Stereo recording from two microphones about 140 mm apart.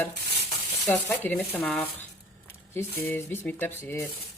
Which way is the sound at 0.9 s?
15° left (ahead or behind).